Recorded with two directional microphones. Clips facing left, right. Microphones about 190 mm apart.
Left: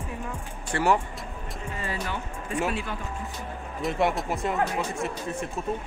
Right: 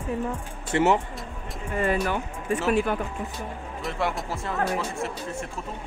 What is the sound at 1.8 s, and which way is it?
Speech, 55° right (ahead or behind).